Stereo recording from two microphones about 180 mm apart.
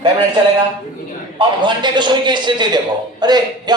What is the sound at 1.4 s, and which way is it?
A man's voice, 25° right (ahead or behind).